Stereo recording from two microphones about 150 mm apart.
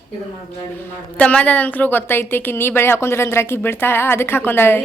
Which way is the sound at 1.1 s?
10° left (ahead or behind).